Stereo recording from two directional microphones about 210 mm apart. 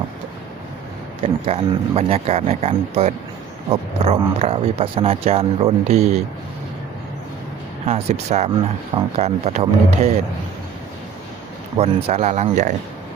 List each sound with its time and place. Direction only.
1.2 s speech: 30° right (ahead or behind)
7.9 s speech: 30° right (ahead or behind)
11.8 s speech: 30° right (ahead or behind)